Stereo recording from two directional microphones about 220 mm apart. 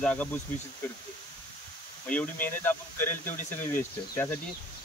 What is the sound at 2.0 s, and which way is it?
Speech, 5° left (ahead or behind).